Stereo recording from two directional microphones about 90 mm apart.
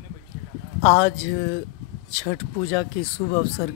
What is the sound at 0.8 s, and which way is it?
Speech, 45° left (ahead or behind).